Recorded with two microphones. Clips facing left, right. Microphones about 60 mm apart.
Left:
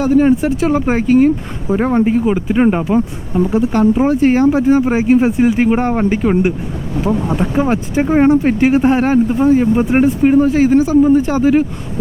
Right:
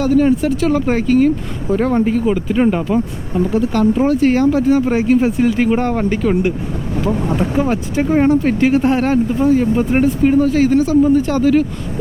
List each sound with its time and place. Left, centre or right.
0.0 s speech: left
7.5 s speech: left